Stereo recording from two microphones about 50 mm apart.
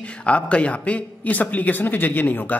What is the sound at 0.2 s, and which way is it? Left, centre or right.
A man's voice, left.